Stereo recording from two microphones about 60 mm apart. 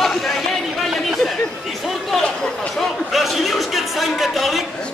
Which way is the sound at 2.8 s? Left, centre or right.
Centre.